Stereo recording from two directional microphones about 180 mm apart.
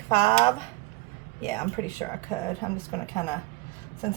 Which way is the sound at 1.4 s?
15° left (ahead or behind).